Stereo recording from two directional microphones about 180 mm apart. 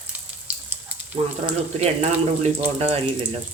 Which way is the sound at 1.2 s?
35° right (ahead or behind).